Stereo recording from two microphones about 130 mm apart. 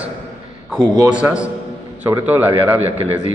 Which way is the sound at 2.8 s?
50° right (ahead or behind).